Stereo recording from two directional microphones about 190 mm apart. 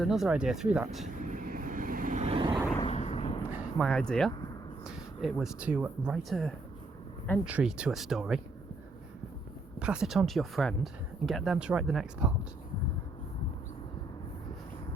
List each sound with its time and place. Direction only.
0.0 s speech: centre (ahead or behind)
1.2 s vehicle: 45° right (ahead or behind)
2.7 s vehicle: 30° left (ahead or behind)
3.5 s speech: 5° left (ahead or behind)
9.8 s speech: 5° right (ahead or behind)